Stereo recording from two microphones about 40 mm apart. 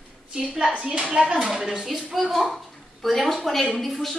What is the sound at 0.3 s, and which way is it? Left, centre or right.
A woman's voice, centre.